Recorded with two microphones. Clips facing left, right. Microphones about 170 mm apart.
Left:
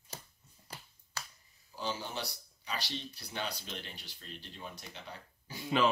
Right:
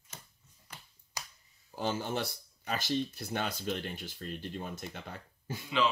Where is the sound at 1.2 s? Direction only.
15° right (ahead or behind).